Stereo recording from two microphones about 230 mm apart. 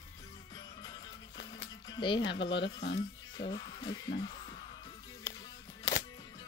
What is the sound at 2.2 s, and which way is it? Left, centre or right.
Speech, left.